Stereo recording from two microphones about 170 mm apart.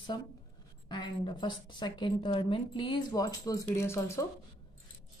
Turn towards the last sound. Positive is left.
turn(degrees=20)  # may be behind; listen again after turning